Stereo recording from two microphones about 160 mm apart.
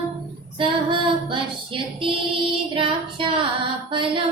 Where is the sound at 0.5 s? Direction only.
30° right (ahead or behind).